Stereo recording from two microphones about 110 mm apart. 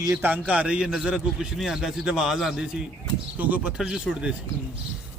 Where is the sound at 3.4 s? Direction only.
15° right (ahead or behind).